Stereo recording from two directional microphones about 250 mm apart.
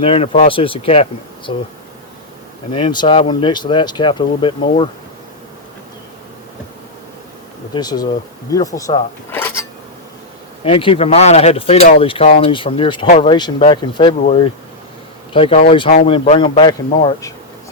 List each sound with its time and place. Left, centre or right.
0.0 s speech: left
2.7 s speech: centre
7.7 s speech: centre
10.6 s speech: left